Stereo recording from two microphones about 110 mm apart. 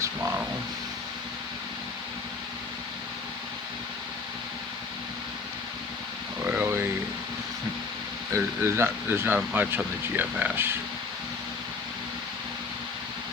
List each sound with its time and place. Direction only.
0.0 s vehicle: 20° right (ahead or behind)
6.4 s a sound: 20° right (ahead or behind)
8.3 s speech: 20° right (ahead or behind)